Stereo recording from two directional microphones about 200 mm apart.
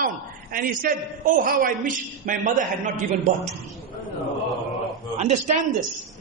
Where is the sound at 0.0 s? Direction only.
45° right (ahead or behind).